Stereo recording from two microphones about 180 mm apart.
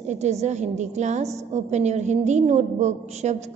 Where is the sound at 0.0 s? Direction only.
40° right (ahead or behind).